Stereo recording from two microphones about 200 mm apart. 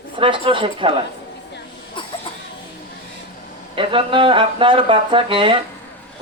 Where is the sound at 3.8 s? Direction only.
25° right (ahead or behind).